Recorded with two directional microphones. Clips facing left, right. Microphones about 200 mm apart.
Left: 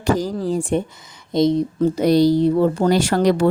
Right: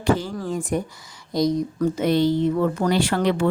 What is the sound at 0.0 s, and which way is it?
Speech, 40° left (ahead or behind).